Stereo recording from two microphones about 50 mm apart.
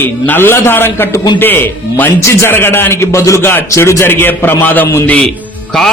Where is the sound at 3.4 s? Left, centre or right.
Left.